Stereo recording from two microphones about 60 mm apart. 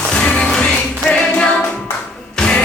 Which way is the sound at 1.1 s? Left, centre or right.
Left.